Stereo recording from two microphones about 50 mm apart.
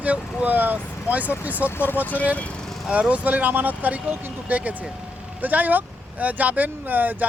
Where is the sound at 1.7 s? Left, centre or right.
Left.